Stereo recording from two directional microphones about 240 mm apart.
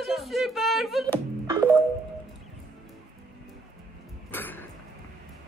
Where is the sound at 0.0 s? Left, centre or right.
Centre.